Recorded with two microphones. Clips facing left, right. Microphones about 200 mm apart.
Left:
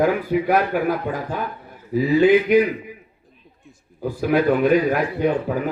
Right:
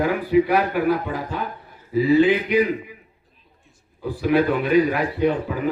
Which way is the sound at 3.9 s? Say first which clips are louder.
Even; 45° left (ahead or behind).